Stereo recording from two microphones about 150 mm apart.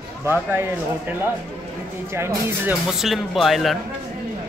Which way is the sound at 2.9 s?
Centre (ahead or behind).